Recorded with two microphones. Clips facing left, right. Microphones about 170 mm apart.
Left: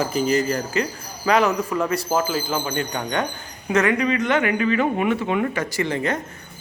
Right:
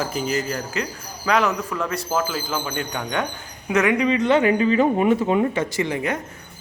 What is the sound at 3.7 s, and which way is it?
Speech, 10° right (ahead or behind).